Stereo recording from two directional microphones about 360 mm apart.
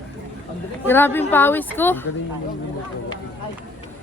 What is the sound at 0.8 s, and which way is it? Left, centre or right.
A woman's voice, centre.